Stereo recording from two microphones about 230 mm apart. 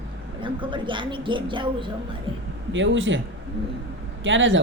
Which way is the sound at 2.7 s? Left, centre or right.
Right.